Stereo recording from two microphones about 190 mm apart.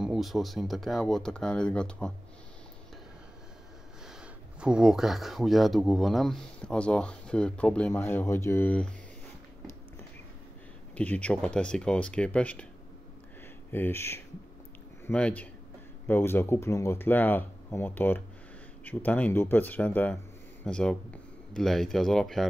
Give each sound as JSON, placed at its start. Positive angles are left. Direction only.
{"t": 0.0, "sound": "speech", "side_deg": 0}
{"t": 4.1, "sound": "speech", "side_deg": -5}
{"t": 11.0, "sound": "speech", "side_deg": 5}
{"t": 13.7, "sound": "speech", "side_deg": 10}